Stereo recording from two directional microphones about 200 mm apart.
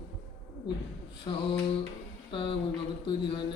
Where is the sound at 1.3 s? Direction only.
25° left (ahead or behind).